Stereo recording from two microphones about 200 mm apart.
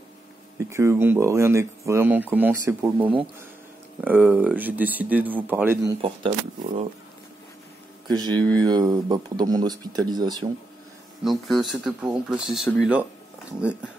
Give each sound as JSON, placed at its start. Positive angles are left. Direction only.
{"t": 0.6, "sound": "speech", "side_deg": -15}
{"t": 3.0, "sound": "speech", "side_deg": -25}
{"t": 4.0, "sound": "speech", "side_deg": -10}
{"t": 5.9, "sound": "speech", "side_deg": -30}
{"t": 8.1, "sound": "speech", "side_deg": -20}
{"t": 11.2, "sound": "speech", "side_deg": 0}